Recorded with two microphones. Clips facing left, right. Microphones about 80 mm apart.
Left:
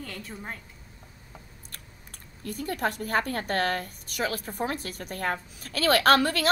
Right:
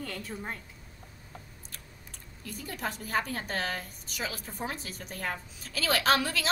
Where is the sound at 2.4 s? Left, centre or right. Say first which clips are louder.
Left 7 dB; left.